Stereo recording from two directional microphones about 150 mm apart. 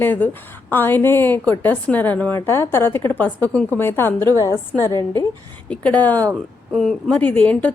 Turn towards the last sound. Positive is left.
turn(degrees=10)  # may be behind; listen again after turning